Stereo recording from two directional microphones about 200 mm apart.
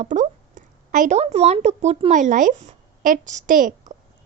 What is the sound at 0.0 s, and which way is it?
A woman's voice, 40° right (ahead or behind).